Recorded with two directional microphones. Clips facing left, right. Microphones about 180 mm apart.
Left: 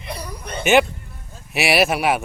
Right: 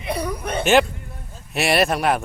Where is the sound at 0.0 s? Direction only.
65° right (ahead or behind).